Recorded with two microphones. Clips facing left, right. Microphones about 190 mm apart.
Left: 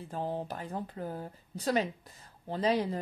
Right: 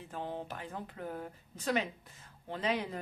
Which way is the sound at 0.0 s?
35° left (ahead or behind).